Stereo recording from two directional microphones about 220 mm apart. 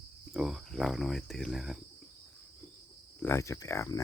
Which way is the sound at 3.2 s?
15° left (ahead or behind).